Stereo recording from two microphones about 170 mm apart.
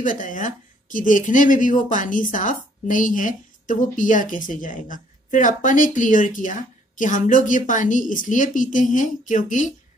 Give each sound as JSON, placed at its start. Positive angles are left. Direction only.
{"t": 0.0, "sound": "speech", "side_deg": 50}